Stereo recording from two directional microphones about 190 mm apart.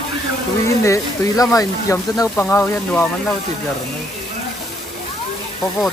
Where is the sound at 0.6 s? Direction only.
15° left (ahead or behind).